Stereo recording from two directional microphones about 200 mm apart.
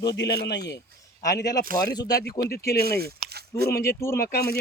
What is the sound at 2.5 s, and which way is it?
Speech, 50° left (ahead or behind).